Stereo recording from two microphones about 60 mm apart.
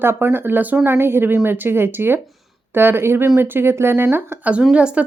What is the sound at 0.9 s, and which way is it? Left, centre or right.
Speech, right.